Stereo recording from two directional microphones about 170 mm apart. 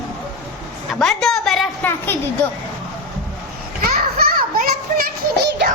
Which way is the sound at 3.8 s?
60° right (ahead or behind).